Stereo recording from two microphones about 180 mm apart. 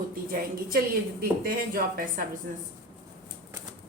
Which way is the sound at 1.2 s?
55° right (ahead or behind).